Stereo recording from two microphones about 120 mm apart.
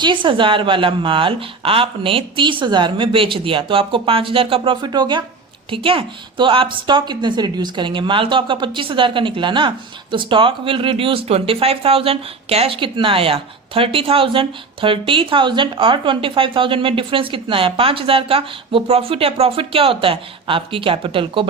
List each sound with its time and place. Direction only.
0.0 s a woman's voice: 45° right (ahead or behind)
5.7 s a woman's voice: 50° right (ahead or behind)